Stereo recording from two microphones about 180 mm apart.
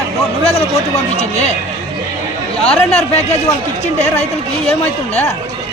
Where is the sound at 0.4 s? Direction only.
35° left (ahead or behind).